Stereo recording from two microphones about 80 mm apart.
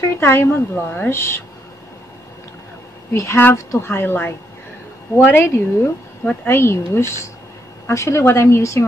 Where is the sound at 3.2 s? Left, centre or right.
Left.